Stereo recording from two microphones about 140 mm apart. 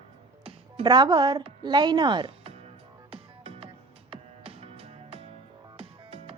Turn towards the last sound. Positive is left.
turn(degrees=-45)  # may be behind; listen again after turning